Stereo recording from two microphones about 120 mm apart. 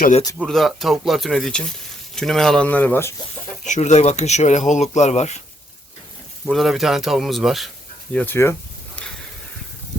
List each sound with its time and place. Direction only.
0.4 s speech: centre (ahead or behind); by 3.2 s 15° left (ahead or behind)
3.6 s speech: 80° left
6.4 s speech: centre (ahead or behind)
8.1 s speech: 15° left (ahead or behind)